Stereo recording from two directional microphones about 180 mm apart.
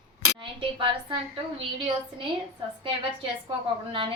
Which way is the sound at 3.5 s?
30° right (ahead or behind).